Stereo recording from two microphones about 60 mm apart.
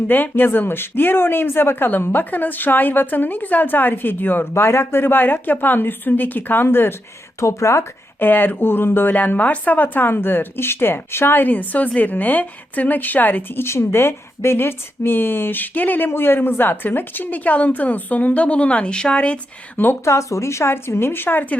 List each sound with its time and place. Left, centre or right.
0.1 s speech: left
7.3 s a woman's voice: left
8.2 s a woman's voice: left
20.1 s a woman's voice: left